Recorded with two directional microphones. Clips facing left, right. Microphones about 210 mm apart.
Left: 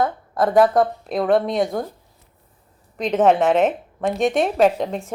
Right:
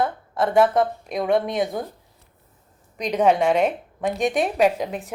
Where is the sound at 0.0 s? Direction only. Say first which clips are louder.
Left 3 dB; 45° left (ahead or behind).